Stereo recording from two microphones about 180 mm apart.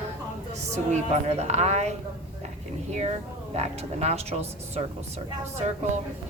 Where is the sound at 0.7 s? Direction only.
40° right (ahead or behind).